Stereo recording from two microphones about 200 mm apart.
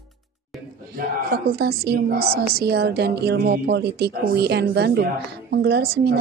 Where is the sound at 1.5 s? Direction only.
50° right (ahead or behind).